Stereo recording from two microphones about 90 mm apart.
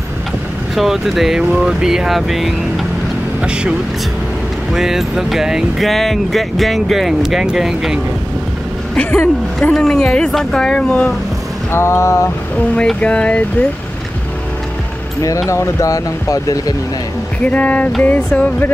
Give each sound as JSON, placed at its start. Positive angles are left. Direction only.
{"t": 0.7, "sound": "speech", "side_deg": -5}
{"t": 4.7, "sound": "speech", "side_deg": -5}
{"t": 8.9, "sound": "speech", "side_deg": 20}
{"t": 9.6, "sound": "speech", "side_deg": 5}
{"t": 11.7, "sound": "speech", "side_deg": 30}
{"t": 12.7, "sound": "speech", "side_deg": 10}
{"t": 15.4, "sound": "speech", "side_deg": 30}
{"t": 17.4, "sound": "speech", "side_deg": 15}